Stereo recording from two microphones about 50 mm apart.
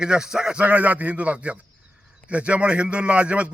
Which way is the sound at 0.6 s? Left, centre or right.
Right.